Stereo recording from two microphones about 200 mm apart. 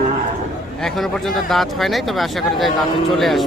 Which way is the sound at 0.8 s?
Centre (ahead or behind).